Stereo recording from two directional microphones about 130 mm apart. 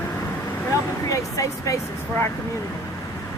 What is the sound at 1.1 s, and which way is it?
Speech, 25° left (ahead or behind).